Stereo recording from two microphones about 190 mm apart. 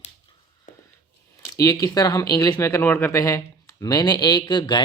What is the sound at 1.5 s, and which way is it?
Speech, 15° left (ahead or behind).